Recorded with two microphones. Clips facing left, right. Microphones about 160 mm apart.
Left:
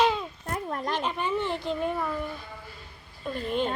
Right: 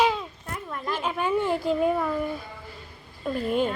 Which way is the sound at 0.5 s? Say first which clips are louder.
Left 4 dB; 45° left (ahead or behind).